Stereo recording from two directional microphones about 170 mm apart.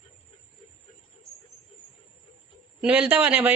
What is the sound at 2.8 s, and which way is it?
Speech, 5° right (ahead or behind).